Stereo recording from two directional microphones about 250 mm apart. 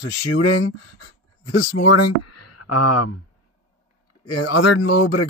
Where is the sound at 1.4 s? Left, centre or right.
Left.